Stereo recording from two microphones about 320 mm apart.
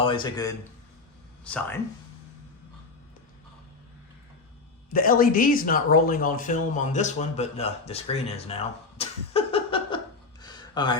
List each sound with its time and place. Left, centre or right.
0.0 s a man's voice: centre
4.9 s speech: left
10.4 s gasp: centre